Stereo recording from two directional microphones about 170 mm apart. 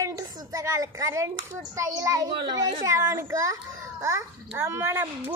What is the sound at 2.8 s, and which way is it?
A child's voice, 15° right (ahead or behind).